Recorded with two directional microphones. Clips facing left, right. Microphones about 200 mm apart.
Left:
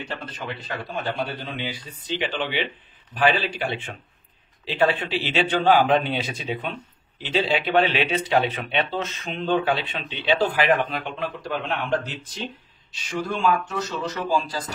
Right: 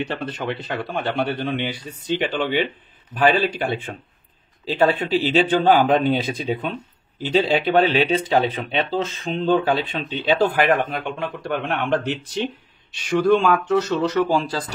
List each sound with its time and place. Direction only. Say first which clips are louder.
0.0 s speech: right 7 dB; 65° right (ahead or behind); by 10.5 s 40° right (ahead or behind)
10.5 s a man's voice: right 2 dB; 55° right (ahead or behind); by 14.6 s 70° right (ahead or behind)